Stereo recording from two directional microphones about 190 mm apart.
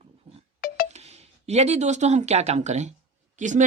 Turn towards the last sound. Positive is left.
turn(degrees=-40)  # may be behind; listen again after turning